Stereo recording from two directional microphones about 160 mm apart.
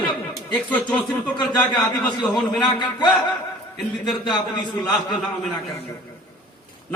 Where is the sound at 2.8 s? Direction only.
30° left (ahead or behind).